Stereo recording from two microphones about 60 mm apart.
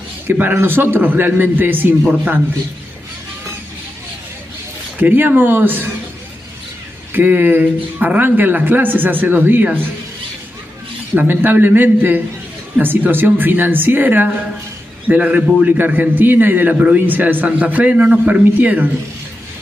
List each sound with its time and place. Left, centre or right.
0.3 s speech: right
5.0 s speech: right
7.2 s speech: right
11.1 s a man's voice: right